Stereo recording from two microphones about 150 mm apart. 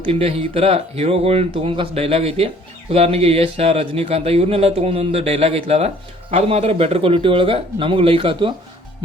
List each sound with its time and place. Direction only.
0.0 s speech: 40° right (ahead or behind)